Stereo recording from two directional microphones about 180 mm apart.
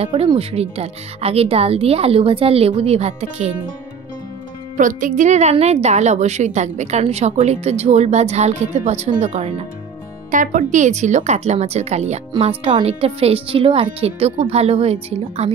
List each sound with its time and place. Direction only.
0.0 s a woman's voice: 30° right (ahead or behind)
4.7 s a woman's voice: 45° right (ahead or behind)